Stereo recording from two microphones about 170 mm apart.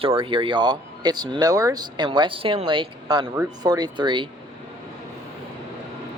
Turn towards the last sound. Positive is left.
turn(degrees=-30)  # may be behind; listen again after turning